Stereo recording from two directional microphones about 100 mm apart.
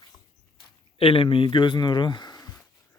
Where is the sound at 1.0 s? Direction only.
70° left (ahead or behind); by 2.6 s 40° left (ahead or behind).